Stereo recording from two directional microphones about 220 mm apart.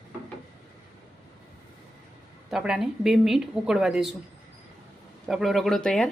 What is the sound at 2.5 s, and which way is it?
Speech, 5° right (ahead or behind).